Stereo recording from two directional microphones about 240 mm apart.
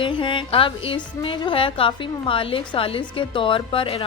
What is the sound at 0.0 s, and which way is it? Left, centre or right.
Speech, centre.